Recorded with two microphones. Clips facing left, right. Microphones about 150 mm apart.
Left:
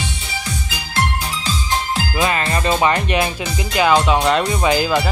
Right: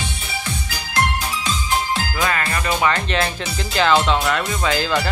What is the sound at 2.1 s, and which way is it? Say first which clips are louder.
Music: left 5 dB; 20° left (ahead or behind).